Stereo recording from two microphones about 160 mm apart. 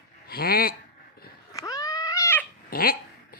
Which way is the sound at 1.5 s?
20° left (ahead or behind).